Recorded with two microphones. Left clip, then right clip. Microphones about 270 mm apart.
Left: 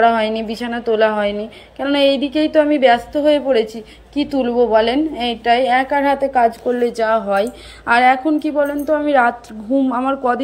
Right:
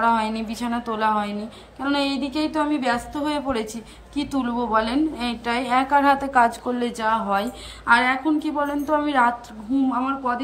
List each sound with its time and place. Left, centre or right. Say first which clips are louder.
0.0 s a woman's voice: left 7 dB; centre
4.3 s a woman's voice: left 8 dB; right
4.6 s a woman's voice: left 8 dB; centre
6.2 s speech: left 4 dB; right
6.9 s a woman's voice: left 6 dB; centre